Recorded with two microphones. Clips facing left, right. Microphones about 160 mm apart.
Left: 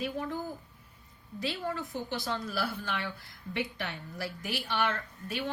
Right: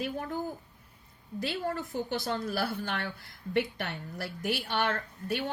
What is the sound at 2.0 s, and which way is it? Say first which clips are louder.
A woman's voice: right 3 dB; 45° right (ahead or behind).